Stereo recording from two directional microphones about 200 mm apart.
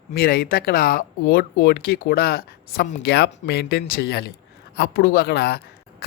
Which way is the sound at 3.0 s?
55° left (ahead or behind).